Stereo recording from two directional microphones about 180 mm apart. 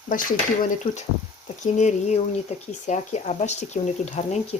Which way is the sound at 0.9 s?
30° left (ahead or behind).